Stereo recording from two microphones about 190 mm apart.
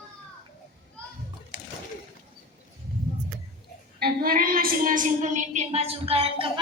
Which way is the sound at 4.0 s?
50° right (ahead or behind).